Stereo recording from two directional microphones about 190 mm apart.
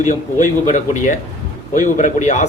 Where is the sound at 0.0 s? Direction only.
40° left (ahead or behind).